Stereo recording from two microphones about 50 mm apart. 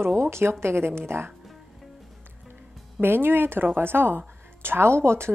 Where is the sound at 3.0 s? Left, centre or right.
Right.